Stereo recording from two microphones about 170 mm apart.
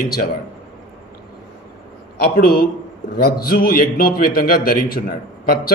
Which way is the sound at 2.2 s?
65° left (ahead or behind).